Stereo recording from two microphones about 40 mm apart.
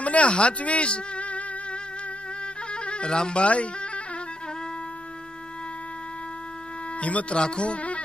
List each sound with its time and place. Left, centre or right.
0.0 s speech: left
7.0 s speech: left
7.3 s speech: left